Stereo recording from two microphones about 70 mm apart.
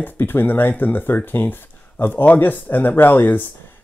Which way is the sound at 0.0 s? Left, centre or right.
Left.